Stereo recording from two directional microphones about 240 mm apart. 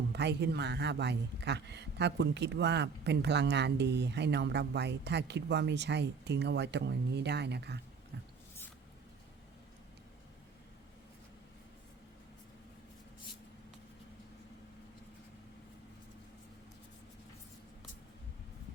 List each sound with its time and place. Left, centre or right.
0.1 s speech: right